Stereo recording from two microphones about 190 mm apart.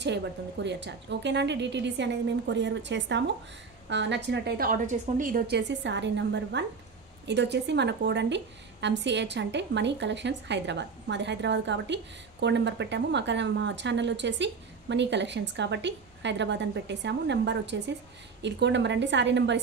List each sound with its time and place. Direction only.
0.0 s a woman's voice: 65° right (ahead or behind)